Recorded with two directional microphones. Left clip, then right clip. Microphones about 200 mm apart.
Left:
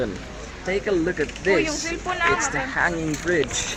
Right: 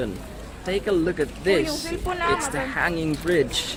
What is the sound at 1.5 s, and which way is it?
Speech, 45° right (ahead or behind).